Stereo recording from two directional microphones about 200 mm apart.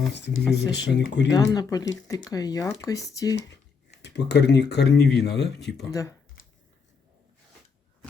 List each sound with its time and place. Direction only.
0.1 s speech: 60° left (ahead or behind)
1.5 s speech: 20° left (ahead or behind)
3.3 s speech: 60° left (ahead or behind)
5.9 s speech: 15° left (ahead or behind)